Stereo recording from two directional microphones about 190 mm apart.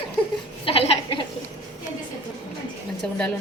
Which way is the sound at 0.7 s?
30° left (ahead or behind).